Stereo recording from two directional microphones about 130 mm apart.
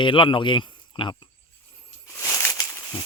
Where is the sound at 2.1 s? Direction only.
20° left (ahead or behind).